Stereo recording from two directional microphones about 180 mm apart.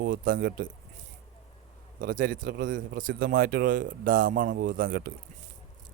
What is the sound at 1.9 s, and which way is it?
Speech, 50° right (ahead or behind).